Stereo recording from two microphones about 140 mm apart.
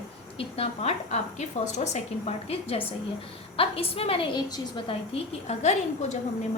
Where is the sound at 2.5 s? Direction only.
45° left (ahead or behind).